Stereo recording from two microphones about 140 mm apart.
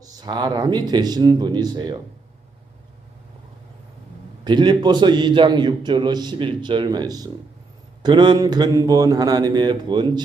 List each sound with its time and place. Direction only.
0.0 s speech: 30° right (ahead or behind)
4.4 s a man's voice: 35° right (ahead or behind)